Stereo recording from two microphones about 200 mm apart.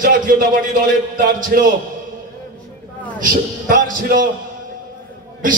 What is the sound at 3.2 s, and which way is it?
A man's voice, 45° right (ahead or behind).